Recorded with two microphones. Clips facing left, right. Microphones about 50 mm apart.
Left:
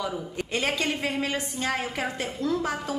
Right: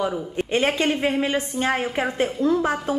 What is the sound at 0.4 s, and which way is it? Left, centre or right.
A woman's voice, right.